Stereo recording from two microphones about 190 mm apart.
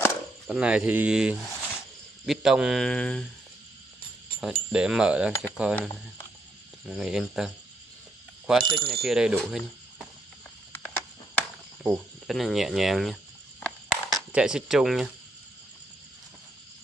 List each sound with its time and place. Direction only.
0.5 s speech: 5° right (ahead or behind)
4.4 s speech: 5° right (ahead or behind)
6.9 s speech: 5° right (ahead or behind)
8.6 s speech: 25° right (ahead or behind)
9.0 s speech: 5° right (ahead or behind)
10.7 s a sound: 10° left (ahead or behind)
11.8 s cricket: centre (ahead or behind)
14.3 s speech: 5° right (ahead or behind)